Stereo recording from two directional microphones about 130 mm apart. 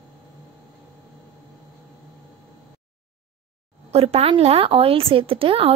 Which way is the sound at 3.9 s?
50° right (ahead or behind).